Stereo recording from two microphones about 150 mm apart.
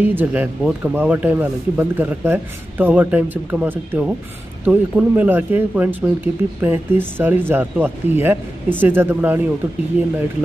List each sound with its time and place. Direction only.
0.0 s speech: 10° right (ahead or behind)